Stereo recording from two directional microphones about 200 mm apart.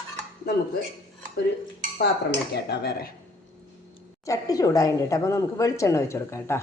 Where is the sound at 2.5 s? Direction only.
55° left (ahead or behind).